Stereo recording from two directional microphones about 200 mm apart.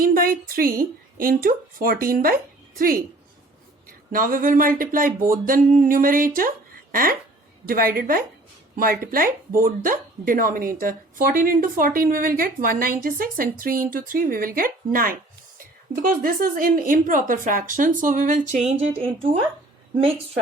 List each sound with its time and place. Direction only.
0.0 s speech: 45° right (ahead or behind)